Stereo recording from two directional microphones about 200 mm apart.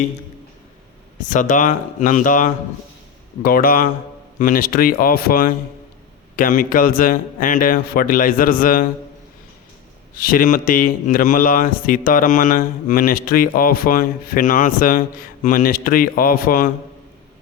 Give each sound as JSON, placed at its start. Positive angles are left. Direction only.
{"t": 1.2, "sound": "speech", "side_deg": 40}
{"t": 10.2, "sound": "speech", "side_deg": 45}